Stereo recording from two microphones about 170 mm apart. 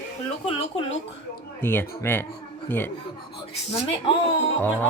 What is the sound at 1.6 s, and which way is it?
Speech, 10° left (ahead or behind).